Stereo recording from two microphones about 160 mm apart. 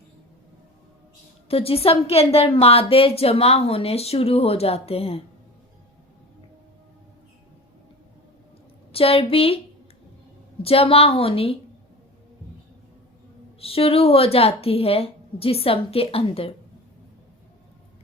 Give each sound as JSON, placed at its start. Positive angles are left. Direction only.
{"t": 1.5, "sound": "a woman's voice", "side_deg": 35}
{"t": 8.9, "sound": "a woman's voice", "side_deg": 35}
{"t": 10.6, "sound": "a woman's voice", "side_deg": 35}
{"t": 13.6, "sound": "a woman's voice", "side_deg": 35}